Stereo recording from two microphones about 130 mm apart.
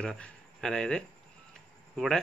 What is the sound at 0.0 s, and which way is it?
A man's voice, 5° left (ahead or behind).